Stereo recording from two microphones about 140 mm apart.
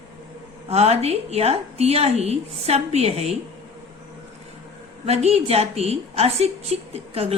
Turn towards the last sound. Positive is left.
turn(degrees=-45)  # may be behind; listen again after turning